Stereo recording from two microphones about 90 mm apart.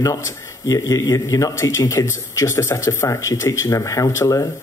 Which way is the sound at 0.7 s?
45° left (ahead or behind).